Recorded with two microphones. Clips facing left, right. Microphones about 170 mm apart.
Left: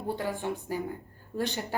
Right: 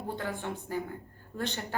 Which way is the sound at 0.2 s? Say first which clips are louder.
Left 3 dB; 15° left (ahead or behind).